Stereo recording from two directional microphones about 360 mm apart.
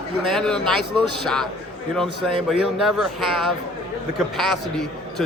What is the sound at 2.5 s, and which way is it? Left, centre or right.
Speech, centre.